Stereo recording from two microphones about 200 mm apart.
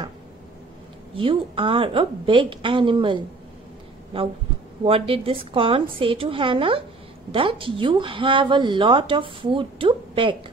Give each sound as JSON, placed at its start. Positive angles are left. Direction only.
{"t": 1.1, "sound": "speech", "side_deg": -25}
{"t": 4.8, "sound": "speech", "side_deg": -25}